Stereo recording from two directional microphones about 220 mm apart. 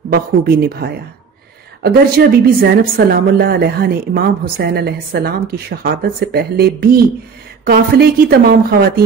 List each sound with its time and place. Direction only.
0.1 s a woman's voice: 45° right (ahead or behind)